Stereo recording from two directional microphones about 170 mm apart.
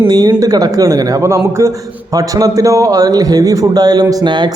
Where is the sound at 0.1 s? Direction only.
25° right (ahead or behind).